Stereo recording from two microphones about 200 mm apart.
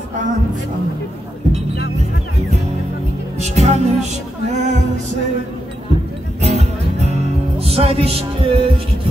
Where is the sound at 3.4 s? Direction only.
35° right (ahead or behind).